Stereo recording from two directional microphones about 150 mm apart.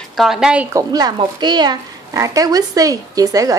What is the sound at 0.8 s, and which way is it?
A woman's voice, 25° right (ahead or behind).